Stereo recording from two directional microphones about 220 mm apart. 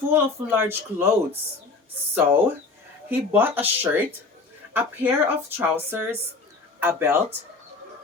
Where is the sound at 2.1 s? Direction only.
10° right (ahead or behind).